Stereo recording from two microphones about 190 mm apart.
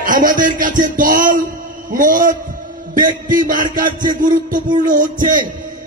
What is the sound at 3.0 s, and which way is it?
Music, 20° right (ahead or behind).